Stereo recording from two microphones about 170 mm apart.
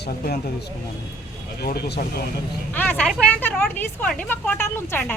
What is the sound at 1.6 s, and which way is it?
Speech, 70° left (ahead or behind).